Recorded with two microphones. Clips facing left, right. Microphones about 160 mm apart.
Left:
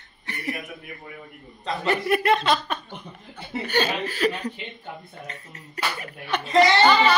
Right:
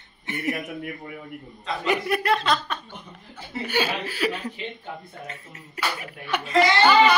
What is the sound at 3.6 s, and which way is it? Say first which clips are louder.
Speech: left 1 dB; 10° right (ahead or behind).